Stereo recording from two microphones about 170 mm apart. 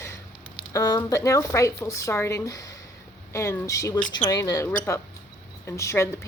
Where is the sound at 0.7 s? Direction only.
20° left (ahead or behind).